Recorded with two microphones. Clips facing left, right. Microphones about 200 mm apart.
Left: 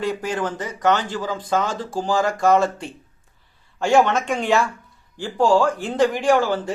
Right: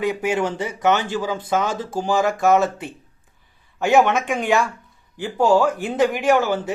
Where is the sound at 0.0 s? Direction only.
5° right (ahead or behind).